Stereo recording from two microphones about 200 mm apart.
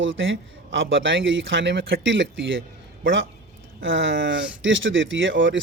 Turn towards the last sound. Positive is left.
turn(degrees=-65)  # may be behind; listen again after turning